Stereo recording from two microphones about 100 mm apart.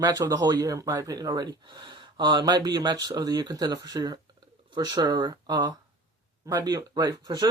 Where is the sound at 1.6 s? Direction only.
50° right (ahead or behind).